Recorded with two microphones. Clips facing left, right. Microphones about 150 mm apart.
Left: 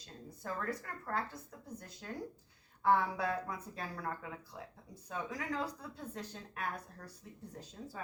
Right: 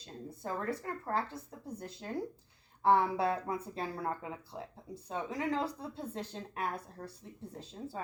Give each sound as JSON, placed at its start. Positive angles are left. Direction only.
{"t": 0.3, "sound": "a woman's voice", "side_deg": -25}